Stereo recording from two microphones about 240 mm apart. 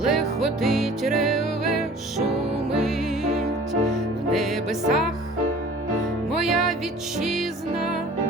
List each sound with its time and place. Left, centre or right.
0.0 s music: centre
6.4 s music: centre